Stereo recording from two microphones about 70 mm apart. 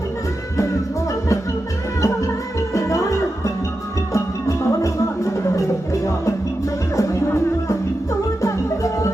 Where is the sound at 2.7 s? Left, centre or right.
Left.